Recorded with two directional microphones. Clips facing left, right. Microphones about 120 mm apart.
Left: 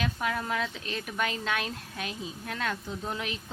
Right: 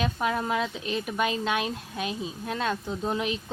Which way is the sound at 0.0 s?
25° right (ahead or behind).